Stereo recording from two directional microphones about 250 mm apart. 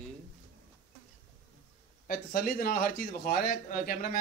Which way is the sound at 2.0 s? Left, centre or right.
Left.